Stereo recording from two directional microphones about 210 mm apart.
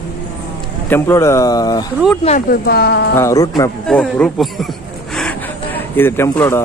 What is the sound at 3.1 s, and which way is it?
Speech, 15° left (ahead or behind).